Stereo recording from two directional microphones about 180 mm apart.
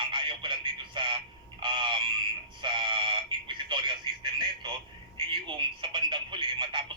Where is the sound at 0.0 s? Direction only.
25° right (ahead or behind).